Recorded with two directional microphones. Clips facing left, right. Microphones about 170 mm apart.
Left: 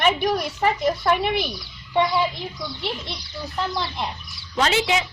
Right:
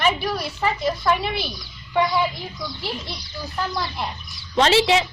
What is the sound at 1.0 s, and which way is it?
Speech, 55° left (ahead or behind).